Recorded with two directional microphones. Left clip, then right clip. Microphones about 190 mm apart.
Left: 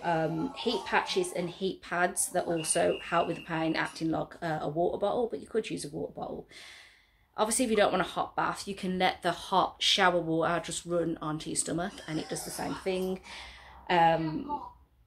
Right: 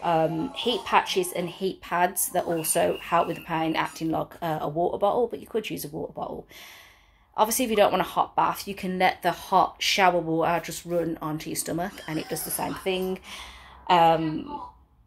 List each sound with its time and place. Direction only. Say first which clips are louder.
0.0 s speech: right 6 dB; 5° right (ahead or behind)
7.3 s speech: right 5 dB; centre (ahead or behind)